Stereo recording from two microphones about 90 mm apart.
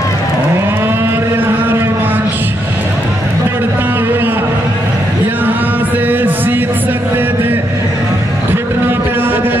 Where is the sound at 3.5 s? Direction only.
25° right (ahead or behind).